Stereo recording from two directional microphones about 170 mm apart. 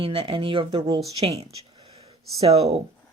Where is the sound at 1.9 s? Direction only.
35° right (ahead or behind).